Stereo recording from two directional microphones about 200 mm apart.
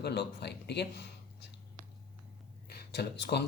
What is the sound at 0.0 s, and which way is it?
Speech, 55° left (ahead or behind).